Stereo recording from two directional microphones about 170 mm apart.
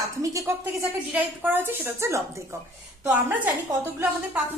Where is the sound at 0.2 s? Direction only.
15° right (ahead or behind).